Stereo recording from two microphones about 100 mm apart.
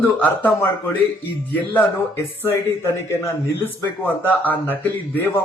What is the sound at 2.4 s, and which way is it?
Speech, 30° left (ahead or behind).